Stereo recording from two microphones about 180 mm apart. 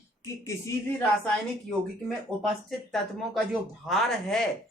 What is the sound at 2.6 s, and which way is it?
Speech, centre (ahead or behind).